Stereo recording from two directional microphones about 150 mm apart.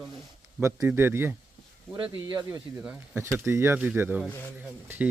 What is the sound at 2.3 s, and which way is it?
Speech, 10° right (ahead or behind).